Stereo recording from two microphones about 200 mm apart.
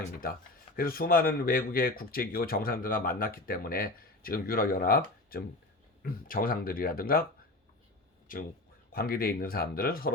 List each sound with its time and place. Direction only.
0.8 s speech: 45° left (ahead or behind)
8.3 s speech: 45° left (ahead or behind)